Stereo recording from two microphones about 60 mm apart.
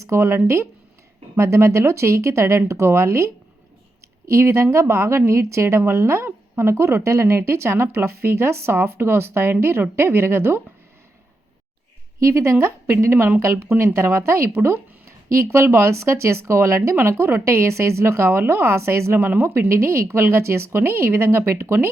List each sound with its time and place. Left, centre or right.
0.1 s a woman's voice: right
12.2 s a woman's voice: right
19.3 s speech: right
19.5 s a woman's voice: right